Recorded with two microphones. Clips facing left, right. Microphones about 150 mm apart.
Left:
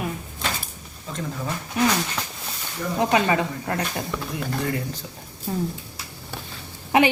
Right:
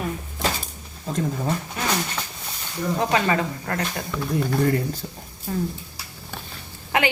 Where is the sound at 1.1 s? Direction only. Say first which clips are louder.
Right 6 dB; 40° right (ahead or behind).